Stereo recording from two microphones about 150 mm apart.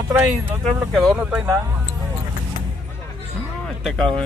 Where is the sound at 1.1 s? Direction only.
10° right (ahead or behind).